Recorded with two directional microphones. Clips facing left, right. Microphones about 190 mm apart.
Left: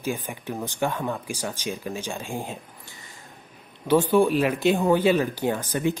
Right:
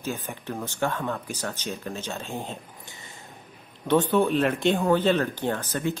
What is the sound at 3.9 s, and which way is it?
Speech, 10° left (ahead or behind).